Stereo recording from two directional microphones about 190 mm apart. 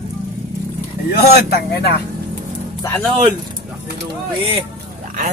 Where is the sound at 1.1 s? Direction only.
55° left (ahead or behind).